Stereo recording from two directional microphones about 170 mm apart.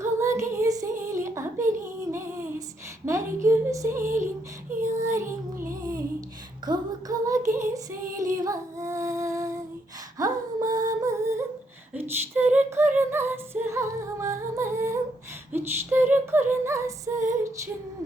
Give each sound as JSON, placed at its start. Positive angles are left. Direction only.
{"t": 0.0, "sound": "child singing", "side_deg": -15}
{"t": 3.1, "sound": "a woman's voice", "side_deg": -15}
{"t": 4.8, "sound": "child singing", "side_deg": -15}
{"t": 5.8, "sound": "humming", "side_deg": -20}
{"t": 6.7, "sound": "female singing", "side_deg": -20}
{"t": 10.2, "sound": "humming", "side_deg": -20}
{"t": 12.4, "sound": "music", "side_deg": -10}
{"t": 15.5, "sound": "a sound", "side_deg": -15}
{"t": 16.5, "sound": "music", "side_deg": -15}